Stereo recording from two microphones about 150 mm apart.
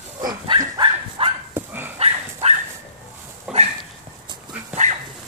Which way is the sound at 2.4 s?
45° right (ahead or behind).